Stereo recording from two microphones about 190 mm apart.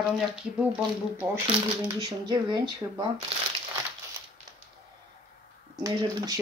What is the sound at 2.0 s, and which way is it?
Speech, 20° right (ahead or behind).